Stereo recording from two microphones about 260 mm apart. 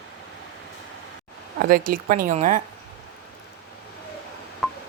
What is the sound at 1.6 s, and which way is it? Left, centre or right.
Speech, right.